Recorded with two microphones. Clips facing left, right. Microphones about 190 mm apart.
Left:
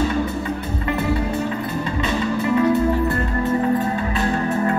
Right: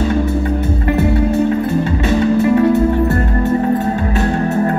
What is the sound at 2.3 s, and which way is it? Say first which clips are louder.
Music: right 6 dB; 50° right (ahead or behind).